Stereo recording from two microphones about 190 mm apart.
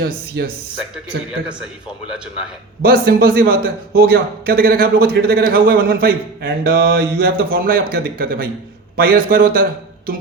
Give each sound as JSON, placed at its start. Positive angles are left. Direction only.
{"t": 0.0, "sound": "speech", "side_deg": -55}
{"t": 2.0, "sound": "speech", "side_deg": -5}
{"t": 2.8, "sound": "a man's voice", "side_deg": -55}